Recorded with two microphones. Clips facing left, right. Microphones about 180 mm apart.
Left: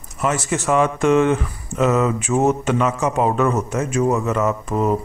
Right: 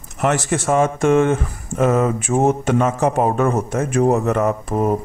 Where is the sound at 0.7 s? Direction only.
50° right (ahead or behind).